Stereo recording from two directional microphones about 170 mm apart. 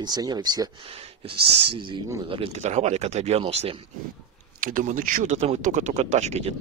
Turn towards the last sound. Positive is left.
turn(degrees=-40)  # may be behind; listen again after turning